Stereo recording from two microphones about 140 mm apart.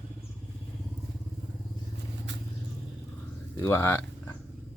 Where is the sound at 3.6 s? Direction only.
20° left (ahead or behind).